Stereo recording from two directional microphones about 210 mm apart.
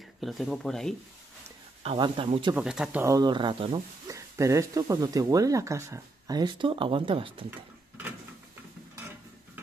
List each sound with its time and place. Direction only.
0.2 s speech: centre (ahead or behind)
1.8 s speech: 25° right (ahead or behind)
2.5 s speech: 5° right (ahead or behind); by 3.8 s 25° right (ahead or behind)
4.1 s speech: 15° right (ahead or behind)